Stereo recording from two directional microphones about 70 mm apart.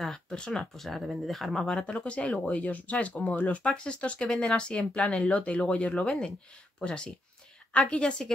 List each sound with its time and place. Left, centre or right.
0.0 s speech: centre